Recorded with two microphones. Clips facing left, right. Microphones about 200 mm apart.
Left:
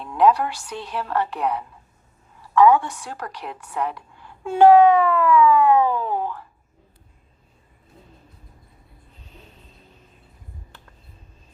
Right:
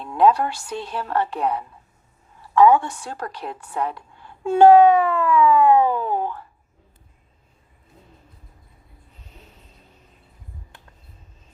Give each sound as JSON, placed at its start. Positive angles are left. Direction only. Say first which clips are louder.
{"t": 0.2, "sound": "a woman's voice", "louder": "right 1 dB", "side_deg": -30}
{"t": 2.6, "sound": "a woman's voice", "louder": "right 1 dB", "side_deg": -25}